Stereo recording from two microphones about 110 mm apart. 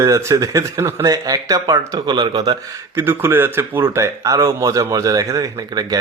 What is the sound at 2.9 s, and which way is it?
Speech, 20° right (ahead or behind).